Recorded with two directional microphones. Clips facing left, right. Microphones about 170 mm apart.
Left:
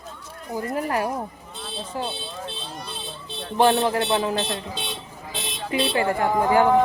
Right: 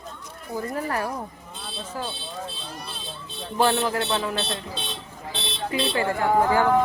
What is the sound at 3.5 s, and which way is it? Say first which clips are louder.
Speech: left 3 dB; 20° left (ahead or behind).